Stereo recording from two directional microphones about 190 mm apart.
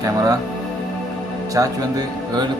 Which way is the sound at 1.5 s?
20° right (ahead or behind).